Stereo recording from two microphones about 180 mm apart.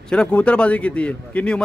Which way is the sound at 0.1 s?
5° left (ahead or behind).